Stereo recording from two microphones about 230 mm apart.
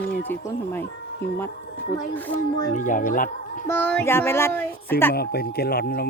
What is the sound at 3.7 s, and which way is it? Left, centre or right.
Speech, centre.